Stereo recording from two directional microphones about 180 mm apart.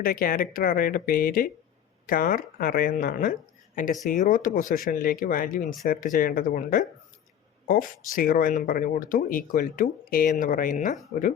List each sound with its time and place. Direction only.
0.0 s speech: 55° left (ahead or behind)